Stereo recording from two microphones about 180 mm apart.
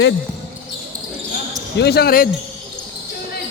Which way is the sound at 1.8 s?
65° left (ahead or behind).